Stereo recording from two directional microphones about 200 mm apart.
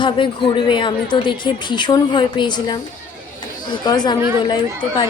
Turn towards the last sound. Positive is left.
turn(degrees=25)  # may be behind; listen again after turning